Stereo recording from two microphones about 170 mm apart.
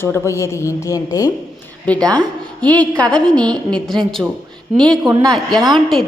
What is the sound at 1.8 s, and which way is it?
A woman's voice, 5° left (ahead or behind).